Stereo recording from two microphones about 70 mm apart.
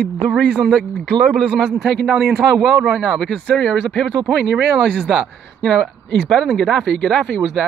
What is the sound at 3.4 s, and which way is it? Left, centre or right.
Speech, centre.